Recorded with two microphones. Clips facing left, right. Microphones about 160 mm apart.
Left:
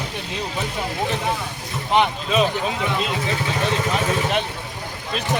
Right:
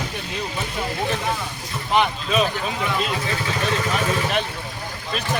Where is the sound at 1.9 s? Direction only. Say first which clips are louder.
Left 1 dB; 20° left (ahead or behind).